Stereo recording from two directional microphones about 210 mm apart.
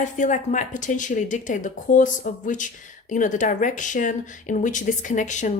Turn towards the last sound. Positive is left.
turn(degrees=35)  # may be behind; listen again after turning